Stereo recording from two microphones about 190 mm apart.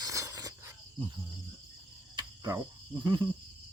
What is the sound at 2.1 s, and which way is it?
Cricket, 20° right (ahead or behind).